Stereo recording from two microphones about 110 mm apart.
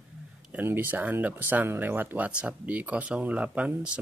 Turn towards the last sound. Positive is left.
turn(degrees=-10)  # may be behind; listen again after turning